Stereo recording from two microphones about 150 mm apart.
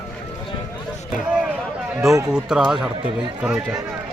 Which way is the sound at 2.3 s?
5° right (ahead or behind).